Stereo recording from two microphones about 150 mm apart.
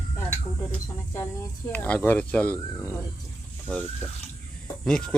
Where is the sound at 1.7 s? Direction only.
10° left (ahead or behind).